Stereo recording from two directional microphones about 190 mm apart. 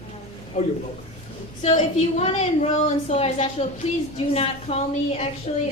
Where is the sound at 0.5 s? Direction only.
45° left (ahead or behind).